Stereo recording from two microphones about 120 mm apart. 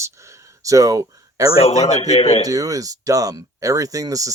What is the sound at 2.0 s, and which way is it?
Speech, 55° left (ahead or behind).